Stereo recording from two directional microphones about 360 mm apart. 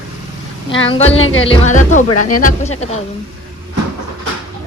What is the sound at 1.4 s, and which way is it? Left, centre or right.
Speech, centre.